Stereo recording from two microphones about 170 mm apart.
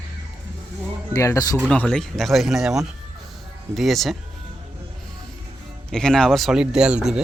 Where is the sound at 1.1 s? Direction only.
20° left (ahead or behind).